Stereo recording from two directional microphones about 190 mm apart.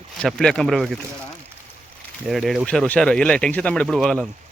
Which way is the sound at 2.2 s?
Centre (ahead or behind).